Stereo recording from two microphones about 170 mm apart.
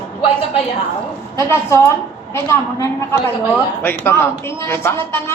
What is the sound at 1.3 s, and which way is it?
Speech, 15° left (ahead or behind).